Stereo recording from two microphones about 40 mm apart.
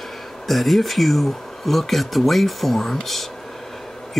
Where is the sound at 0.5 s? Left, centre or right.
Centre.